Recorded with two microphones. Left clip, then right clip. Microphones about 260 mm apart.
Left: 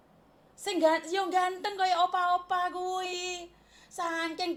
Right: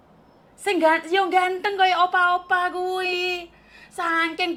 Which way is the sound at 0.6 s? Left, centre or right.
Right.